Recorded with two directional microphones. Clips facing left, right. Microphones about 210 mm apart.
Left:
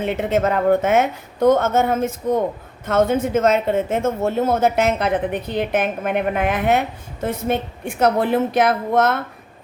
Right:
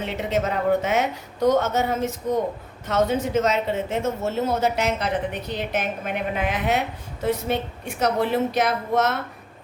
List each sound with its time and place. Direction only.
0.0 s speech: 55° left (ahead or behind)